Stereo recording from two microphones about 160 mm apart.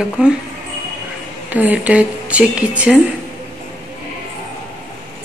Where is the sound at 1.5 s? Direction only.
10° right (ahead or behind).